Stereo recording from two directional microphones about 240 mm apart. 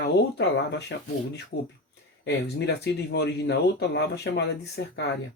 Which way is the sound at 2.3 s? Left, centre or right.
Left.